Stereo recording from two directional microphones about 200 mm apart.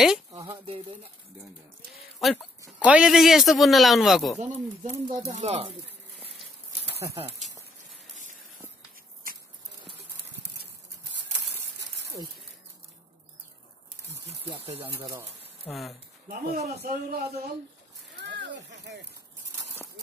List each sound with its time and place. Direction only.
0.4 s speech: 25° right (ahead or behind)
2.1 s a man's voice: centre (ahead or behind)
4.4 s speech: 35° right (ahead or behind)
14.8 s speech: 10° right (ahead or behind)
15.7 s a man's voice: centre (ahead or behind)
16.5 s a man's voice: 50° right (ahead or behind)
18.1 s a sound: 60° right (ahead or behind)